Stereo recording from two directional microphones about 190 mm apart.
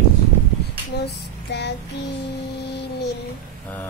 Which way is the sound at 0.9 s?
60° left (ahead or behind).